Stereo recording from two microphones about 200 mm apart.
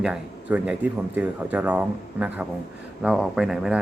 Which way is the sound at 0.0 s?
5° right (ahead or behind).